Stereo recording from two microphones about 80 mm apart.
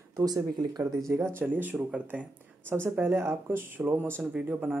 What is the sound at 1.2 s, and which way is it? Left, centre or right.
Speech, right.